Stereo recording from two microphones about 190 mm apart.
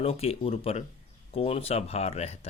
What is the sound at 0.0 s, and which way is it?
Speech, 30° left (ahead or behind).